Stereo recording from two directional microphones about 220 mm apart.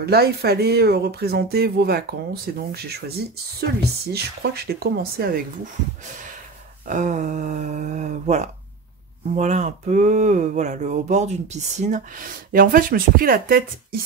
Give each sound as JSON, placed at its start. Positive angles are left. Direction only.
{"t": 0.0, "sound": "speech", "side_deg": -45}
{"t": 4.1, "sound": "speech", "side_deg": -45}
{"t": 6.9, "sound": "speech", "side_deg": -35}